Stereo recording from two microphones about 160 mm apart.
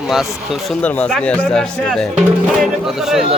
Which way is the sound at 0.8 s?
10° left (ahead or behind).